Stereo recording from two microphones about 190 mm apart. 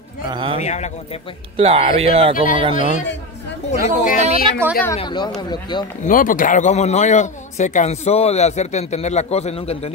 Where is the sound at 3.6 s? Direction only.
45° left (ahead or behind).